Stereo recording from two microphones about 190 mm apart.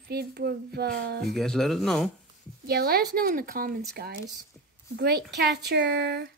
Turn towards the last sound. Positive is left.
turn(degrees=-60)  # may be behind; listen again after turning